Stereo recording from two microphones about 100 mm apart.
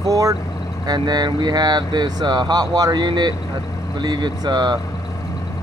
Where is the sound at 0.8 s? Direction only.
45° right (ahead or behind).